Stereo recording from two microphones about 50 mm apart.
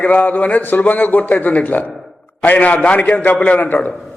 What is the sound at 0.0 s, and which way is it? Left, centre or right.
A man's voice, left.